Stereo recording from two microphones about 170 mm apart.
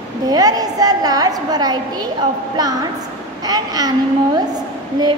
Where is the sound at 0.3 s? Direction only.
20° right (ahead or behind).